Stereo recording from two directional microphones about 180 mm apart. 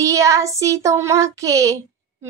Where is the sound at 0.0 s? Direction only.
15° right (ahead or behind).